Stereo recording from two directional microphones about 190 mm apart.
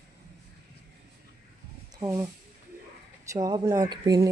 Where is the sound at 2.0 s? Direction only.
15° right (ahead or behind).